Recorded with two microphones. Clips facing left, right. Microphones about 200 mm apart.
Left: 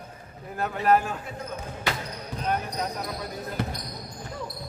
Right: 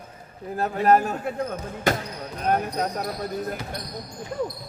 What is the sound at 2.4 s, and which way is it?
Speech, 50° right (ahead or behind).